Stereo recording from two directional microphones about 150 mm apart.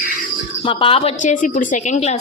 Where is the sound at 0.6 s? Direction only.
35° left (ahead or behind).